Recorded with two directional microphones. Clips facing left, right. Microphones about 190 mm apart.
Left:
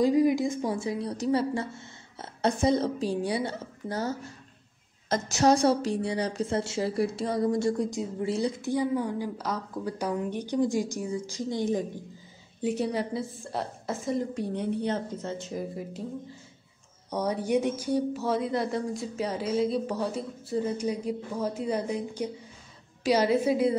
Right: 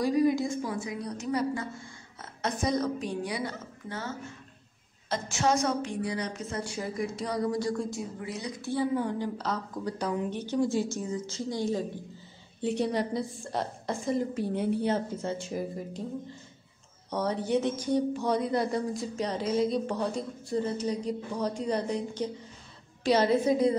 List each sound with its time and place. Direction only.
0.0 s a woman's voice: 20° left (ahead or behind)
8.5 s speech: 15° left (ahead or behind)
12.6 s a woman's voice: 5° left (ahead or behind); by 15.6 s 10° right (ahead or behind)
17.1 s speech: 10° left (ahead or behind)